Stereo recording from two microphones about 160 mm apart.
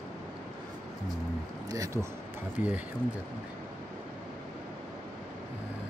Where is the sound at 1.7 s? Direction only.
20° right (ahead or behind).